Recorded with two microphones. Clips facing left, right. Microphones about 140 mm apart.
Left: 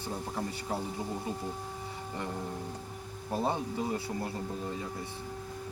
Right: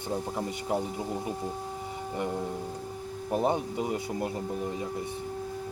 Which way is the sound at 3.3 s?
15° right (ahead or behind).